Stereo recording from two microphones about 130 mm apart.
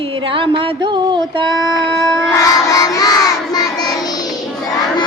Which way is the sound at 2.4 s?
25° left (ahead or behind).